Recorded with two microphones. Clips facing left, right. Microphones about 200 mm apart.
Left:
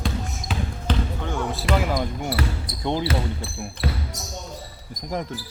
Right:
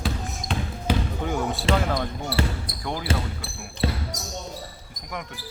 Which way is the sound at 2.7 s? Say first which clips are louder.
Left 2 dB; 60° right (ahead or behind).